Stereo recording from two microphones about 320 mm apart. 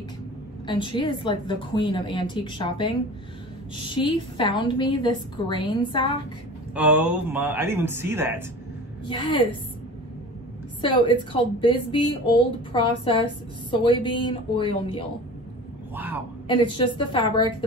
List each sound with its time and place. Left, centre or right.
0.7 s a woman's voice: centre
3.7 s a woman's voice: centre
6.7 s speech: centre
9.0 s a woman's voice: centre
10.8 s a woman's voice: centre
15.9 s a sound: centre
16.4 s a woman's voice: centre